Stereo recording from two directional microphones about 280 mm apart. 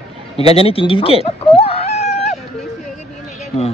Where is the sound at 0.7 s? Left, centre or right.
Centre.